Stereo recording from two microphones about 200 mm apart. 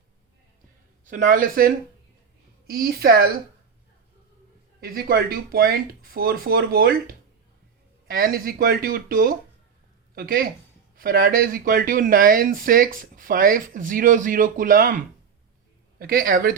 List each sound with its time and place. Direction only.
1.0 s speech: 40° right (ahead or behind)
4.8 s speech: 50° right (ahead or behind)